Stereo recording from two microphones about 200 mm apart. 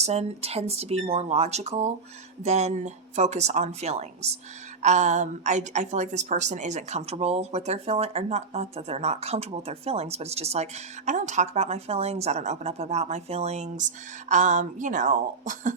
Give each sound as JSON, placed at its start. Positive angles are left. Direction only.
{"t": 0.0, "sound": "a woman's voice", "side_deg": -30}